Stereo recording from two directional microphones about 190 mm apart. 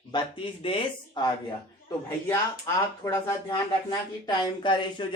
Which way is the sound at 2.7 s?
15° left (ahead or behind).